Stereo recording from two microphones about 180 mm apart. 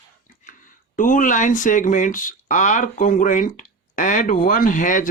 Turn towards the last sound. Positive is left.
turn(degrees=45)  # may be behind; listen again after turning